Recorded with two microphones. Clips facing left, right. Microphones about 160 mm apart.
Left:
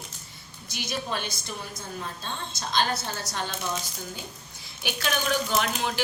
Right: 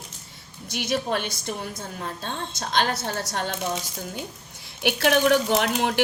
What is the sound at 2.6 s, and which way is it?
Speech, 80° right.